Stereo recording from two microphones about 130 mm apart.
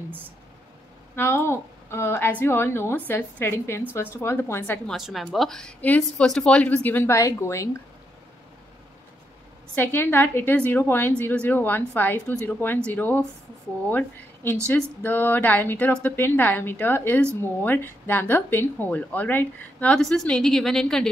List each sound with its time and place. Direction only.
1.1 s a woman's voice: 15° left (ahead or behind)
4.8 s a woman's voice: centre (ahead or behind); by 7.7 s 20° left (ahead or behind)
9.8 s a woman's voice: 15° left (ahead or behind)